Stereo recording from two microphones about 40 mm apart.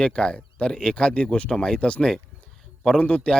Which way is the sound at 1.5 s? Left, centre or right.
Left.